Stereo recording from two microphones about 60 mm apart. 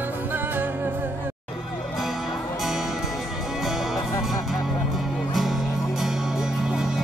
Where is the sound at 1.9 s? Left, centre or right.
Centre.